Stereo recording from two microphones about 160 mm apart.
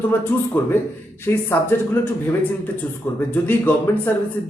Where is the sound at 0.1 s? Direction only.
15° left (ahead or behind).